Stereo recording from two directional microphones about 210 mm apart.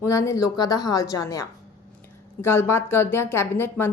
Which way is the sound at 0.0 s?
15° left (ahead or behind).